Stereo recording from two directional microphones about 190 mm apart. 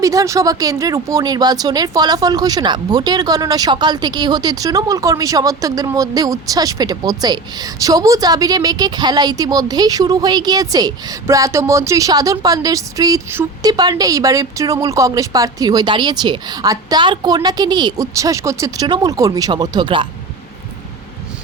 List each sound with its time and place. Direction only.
0.0 s a woman's voice: 15° right (ahead or behind)